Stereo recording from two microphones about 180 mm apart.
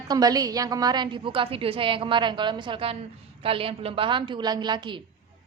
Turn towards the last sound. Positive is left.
turn(degrees=-25)  # may be behind; listen again after turning